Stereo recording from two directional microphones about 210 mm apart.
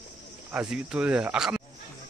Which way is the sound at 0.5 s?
5° right (ahead or behind).